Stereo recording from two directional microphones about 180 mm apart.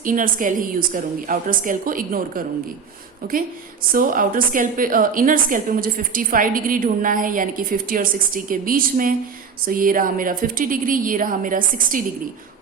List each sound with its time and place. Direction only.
0.0 s a woman's voice: 50° right (ahead or behind)
3.9 s a woman's voice: 50° right (ahead or behind)